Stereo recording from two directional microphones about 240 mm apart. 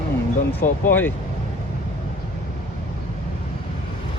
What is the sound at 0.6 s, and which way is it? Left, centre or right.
Speech, left.